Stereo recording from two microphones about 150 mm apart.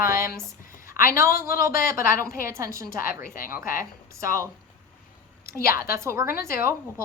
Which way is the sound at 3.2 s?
70° left (ahead or behind).